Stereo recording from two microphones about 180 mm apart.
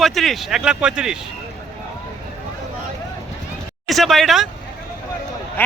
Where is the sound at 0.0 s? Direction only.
Centre (ahead or behind).